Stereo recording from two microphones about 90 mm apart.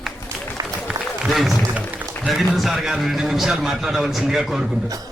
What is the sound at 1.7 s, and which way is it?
Music, 20° right (ahead or behind).